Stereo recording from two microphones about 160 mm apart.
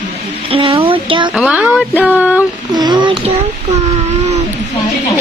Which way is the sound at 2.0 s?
10° right (ahead or behind).